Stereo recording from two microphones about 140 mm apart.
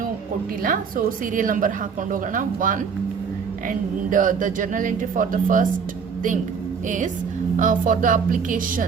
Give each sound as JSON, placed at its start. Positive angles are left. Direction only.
{"t": 0.6, "sound": "a woman's voice", "side_deg": -75}
{"t": 6.8, "sound": "a woman's voice", "side_deg": -65}